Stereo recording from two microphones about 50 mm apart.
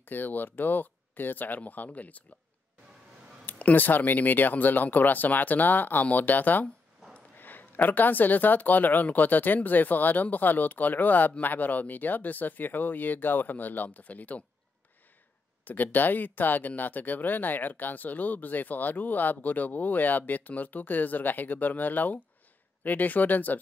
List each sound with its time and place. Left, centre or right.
0.0 s speech: left
3.5 s speech: left
15.6 s speech: left